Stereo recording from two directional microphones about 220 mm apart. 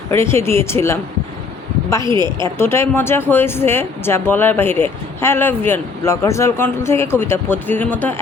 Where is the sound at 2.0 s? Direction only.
20° right (ahead or behind).